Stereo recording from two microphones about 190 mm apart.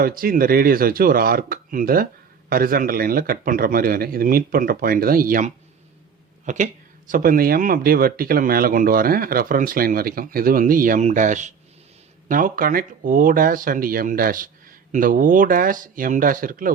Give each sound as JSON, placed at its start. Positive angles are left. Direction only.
{"t": 0.0, "sound": "speech", "side_deg": -50}